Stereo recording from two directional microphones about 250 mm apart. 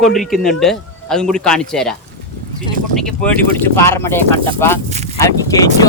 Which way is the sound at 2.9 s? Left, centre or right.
Centre.